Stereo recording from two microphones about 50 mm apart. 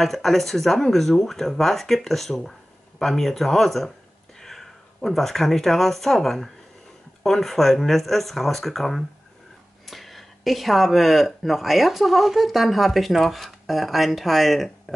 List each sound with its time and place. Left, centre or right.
0.0 s speech: centre